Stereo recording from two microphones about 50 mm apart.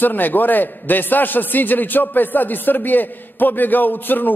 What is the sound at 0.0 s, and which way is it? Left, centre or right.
A man's voice, left.